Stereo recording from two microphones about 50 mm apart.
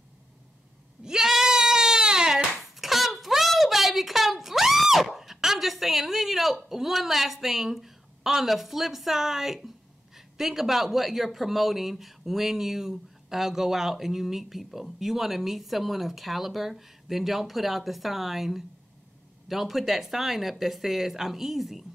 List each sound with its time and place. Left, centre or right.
1.0 s bleat: centre
2.8 s a sound: centre
10.1 s speech: centre